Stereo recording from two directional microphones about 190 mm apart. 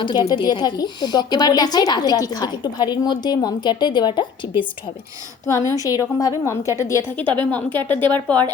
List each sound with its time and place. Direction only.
0.0 s a woman's voice: 25° left (ahead or behind)
5.5 s a woman's voice: 15° left (ahead or behind)